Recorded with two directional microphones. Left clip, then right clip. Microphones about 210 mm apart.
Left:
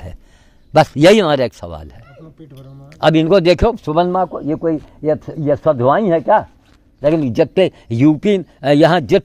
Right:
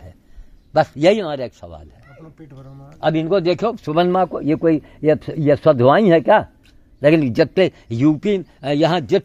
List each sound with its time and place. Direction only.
0.7 s a man's voice: 45° left (ahead or behind)
3.9 s speech: 10° right (ahead or behind)
4.3 s speech: 25° right (ahead or behind)
7.2 s speech: centre (ahead or behind); by 9.2 s 25° left (ahead or behind)